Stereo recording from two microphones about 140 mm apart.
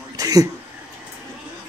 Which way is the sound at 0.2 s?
25° right (ahead or behind).